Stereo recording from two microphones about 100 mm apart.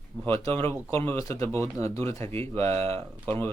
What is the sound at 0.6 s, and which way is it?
Speech, 25° left (ahead or behind).